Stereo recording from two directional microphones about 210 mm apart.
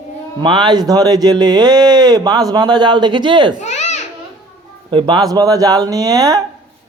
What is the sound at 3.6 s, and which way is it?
Babbling, 35° left (ahead or behind).